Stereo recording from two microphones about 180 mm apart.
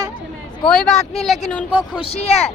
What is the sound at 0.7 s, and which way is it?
Speech, centre (ahead or behind).